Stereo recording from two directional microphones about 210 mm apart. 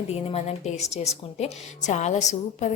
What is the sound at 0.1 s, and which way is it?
Speech, 30° left (ahead or behind).